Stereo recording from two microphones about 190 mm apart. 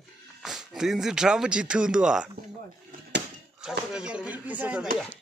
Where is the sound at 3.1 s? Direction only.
65° right (ahead or behind).